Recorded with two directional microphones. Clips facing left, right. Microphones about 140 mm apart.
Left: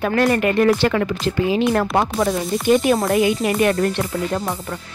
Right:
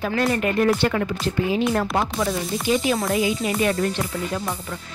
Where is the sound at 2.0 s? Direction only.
55° left (ahead or behind).